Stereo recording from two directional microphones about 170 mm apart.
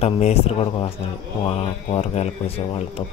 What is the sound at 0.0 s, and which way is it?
Speech, 35° left (ahead or behind).